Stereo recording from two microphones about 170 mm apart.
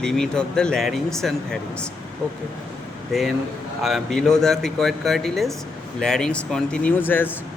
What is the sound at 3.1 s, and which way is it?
Speech, centre (ahead or behind).